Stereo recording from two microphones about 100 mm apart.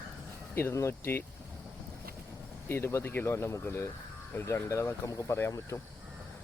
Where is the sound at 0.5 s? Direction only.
25° left (ahead or behind).